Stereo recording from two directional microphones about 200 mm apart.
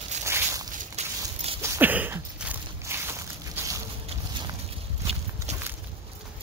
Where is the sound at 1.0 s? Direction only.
35° right (ahead or behind).